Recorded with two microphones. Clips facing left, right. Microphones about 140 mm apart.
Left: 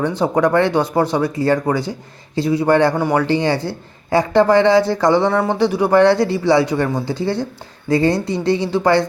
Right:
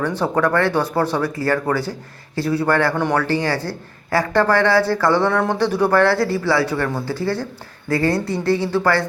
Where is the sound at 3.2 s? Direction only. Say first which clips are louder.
Left 3 dB; 20° left (ahead or behind).